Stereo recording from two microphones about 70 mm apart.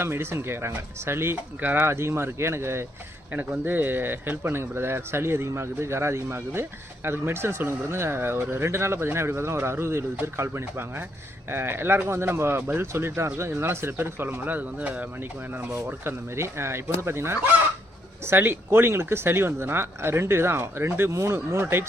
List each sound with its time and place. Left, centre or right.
0.0 s a man's voice: right
15.9 s a man's voice: right